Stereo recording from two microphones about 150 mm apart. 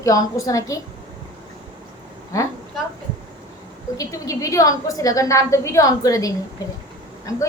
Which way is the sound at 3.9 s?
20° left (ahead or behind).